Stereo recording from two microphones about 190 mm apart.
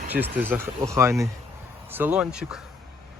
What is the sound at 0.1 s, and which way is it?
Speech, 10° right (ahead or behind).